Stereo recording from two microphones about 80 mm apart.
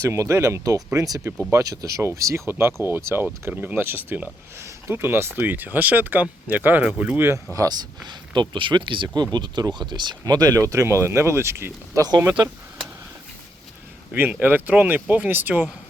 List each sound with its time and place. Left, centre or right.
0.1 s speech: right
2.5 s speech: right
7.5 s speech: right
9.3 s speech: right
14.1 s speech: right